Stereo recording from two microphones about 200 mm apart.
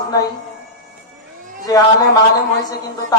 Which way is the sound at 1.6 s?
20° left (ahead or behind).